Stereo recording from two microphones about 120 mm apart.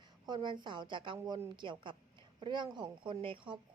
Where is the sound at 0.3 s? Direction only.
40° right (ahead or behind).